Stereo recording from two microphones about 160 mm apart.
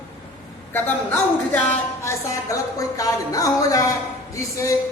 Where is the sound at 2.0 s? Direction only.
20° left (ahead or behind).